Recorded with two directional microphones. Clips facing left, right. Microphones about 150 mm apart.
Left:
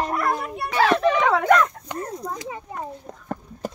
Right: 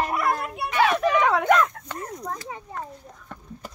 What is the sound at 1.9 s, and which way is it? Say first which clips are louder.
Speech: left 3 dB; 15° left (ahead or behind).